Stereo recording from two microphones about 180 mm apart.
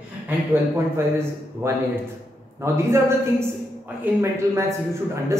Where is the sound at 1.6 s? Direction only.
15° right (ahead or behind).